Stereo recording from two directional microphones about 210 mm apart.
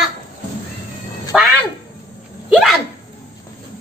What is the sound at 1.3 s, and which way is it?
Speech, 5° right (ahead or behind).